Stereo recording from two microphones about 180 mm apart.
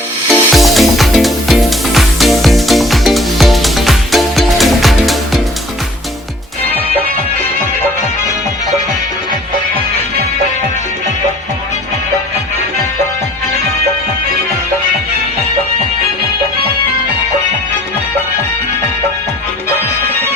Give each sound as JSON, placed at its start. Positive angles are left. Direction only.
{"t": 0.3, "sound": "music", "side_deg": 0}